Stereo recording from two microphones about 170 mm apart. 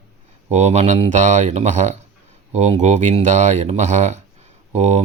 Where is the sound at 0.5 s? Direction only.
40° right (ahead or behind).